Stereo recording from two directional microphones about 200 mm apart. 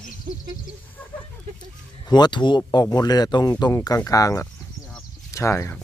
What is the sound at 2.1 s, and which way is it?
Speech, 20° left (ahead or behind).